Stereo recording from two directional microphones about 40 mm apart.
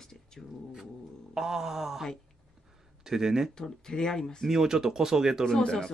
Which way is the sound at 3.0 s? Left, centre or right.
Centre.